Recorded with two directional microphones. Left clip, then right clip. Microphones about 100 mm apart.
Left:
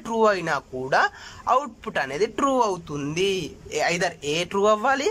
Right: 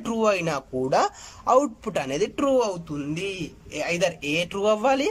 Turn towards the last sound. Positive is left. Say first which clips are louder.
# left 1 dB
turn(degrees=-25)  # may be behind; listen again after turning